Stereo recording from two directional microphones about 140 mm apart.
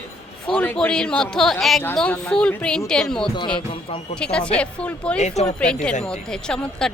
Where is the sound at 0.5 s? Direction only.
10° left (ahead or behind).